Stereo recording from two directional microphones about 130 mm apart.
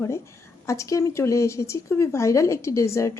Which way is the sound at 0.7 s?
25° left (ahead or behind).